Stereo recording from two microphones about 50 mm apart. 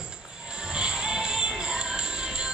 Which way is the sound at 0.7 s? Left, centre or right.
Centre.